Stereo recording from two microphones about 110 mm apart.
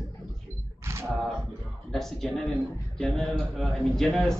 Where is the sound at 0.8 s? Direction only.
25° right (ahead or behind).